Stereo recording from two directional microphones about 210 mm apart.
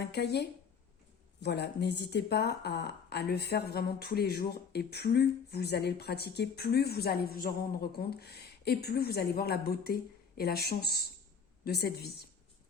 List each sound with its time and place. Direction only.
0.0 s speech: 50° left (ahead or behind)